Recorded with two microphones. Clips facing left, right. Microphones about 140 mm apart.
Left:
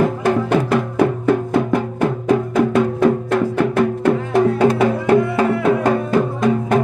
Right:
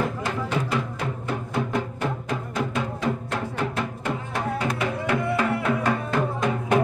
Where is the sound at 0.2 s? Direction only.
60° left (ahead or behind).